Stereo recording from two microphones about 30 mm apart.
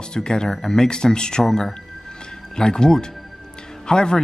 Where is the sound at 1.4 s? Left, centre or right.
Centre.